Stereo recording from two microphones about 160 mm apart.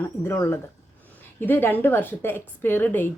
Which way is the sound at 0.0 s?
15° left (ahead or behind).